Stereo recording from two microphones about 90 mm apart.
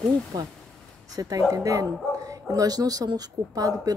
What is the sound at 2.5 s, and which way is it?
Speech, 45° right (ahead or behind).